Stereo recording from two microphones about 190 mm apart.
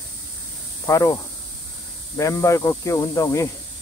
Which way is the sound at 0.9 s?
15° left (ahead or behind).